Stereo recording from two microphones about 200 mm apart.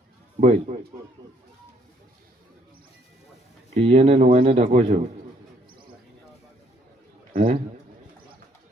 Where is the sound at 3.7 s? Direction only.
30° right (ahead or behind).